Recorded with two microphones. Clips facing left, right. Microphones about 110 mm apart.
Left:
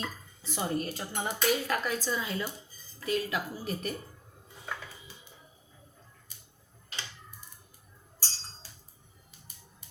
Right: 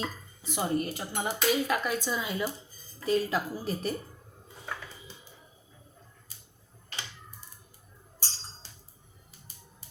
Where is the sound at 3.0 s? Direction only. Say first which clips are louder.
Right 4 dB; 30° right (ahead or behind).